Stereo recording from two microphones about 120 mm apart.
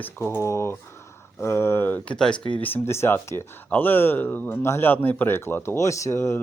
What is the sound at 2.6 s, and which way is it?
Speech, 20° left (ahead or behind).